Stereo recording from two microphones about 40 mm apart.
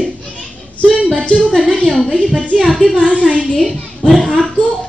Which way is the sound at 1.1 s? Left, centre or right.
Left.